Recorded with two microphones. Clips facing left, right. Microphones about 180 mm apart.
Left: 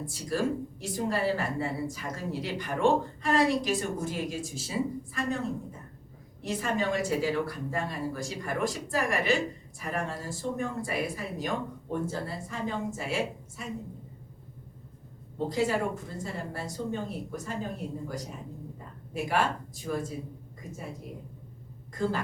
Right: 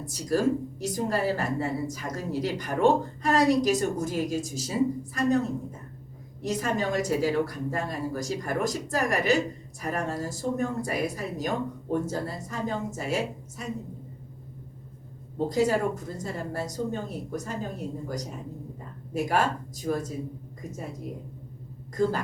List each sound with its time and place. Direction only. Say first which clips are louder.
0.0 s a woman's voice: right 5 dB; 40° right (ahead or behind)
6.4 s a woman's voice: right 2 dB; 40° right (ahead or behind)
15.4 s a woman's voice: right 4 dB; 40° right (ahead or behind)
22.0 s a woman's voice: right 5 dB; 40° right (ahead or behind)